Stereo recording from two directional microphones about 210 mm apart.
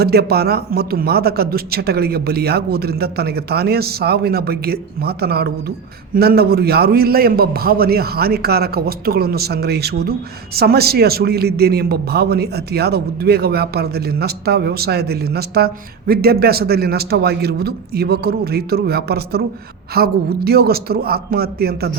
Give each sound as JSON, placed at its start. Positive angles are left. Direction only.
{"t": 0.0, "sound": "a man's voice", "side_deg": -50}